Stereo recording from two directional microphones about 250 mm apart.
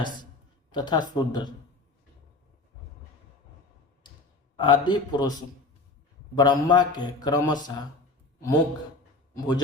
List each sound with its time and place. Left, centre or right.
0.7 s a man's voice: centre
4.5 s a man's voice: centre
6.3 s a man's voice: centre